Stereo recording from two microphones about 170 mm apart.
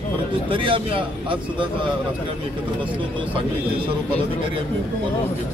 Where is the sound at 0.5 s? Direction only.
30° right (ahead or behind).